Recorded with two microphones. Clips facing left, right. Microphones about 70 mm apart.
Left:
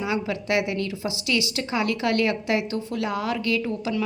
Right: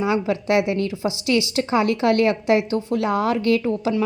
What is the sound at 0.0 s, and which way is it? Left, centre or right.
A woman's voice, right.